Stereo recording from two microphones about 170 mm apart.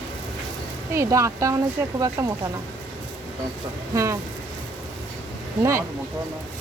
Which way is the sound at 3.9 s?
20° right (ahead or behind).